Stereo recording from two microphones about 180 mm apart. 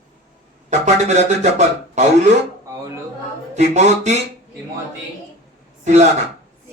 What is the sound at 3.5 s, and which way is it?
Speech, 40° right (ahead or behind).